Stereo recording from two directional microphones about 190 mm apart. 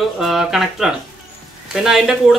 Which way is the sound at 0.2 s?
Centre (ahead or behind).